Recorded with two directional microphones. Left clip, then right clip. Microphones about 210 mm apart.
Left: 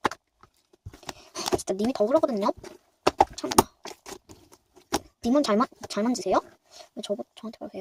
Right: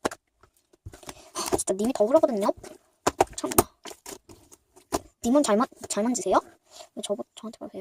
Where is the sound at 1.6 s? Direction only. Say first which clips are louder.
Right 3 dB; 5° right (ahead or behind).